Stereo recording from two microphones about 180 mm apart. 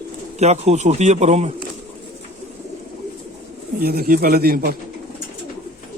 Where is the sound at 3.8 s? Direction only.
60° right (ahead or behind).